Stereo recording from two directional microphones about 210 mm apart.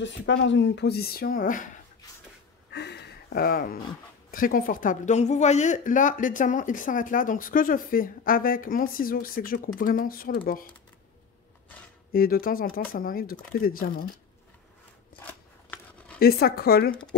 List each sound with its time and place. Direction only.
0.0 s speech: 60° left (ahead or behind); by 1.7 s 40° left (ahead or behind)
2.7 s a sound: 55° left (ahead or behind)
4.3 s speech: 45° left (ahead or behind)
12.1 s speech: 45° left (ahead or behind)
16.2 s speech: 45° left (ahead or behind)